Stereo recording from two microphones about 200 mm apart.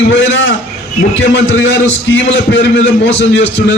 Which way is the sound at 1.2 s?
65° left (ahead or behind).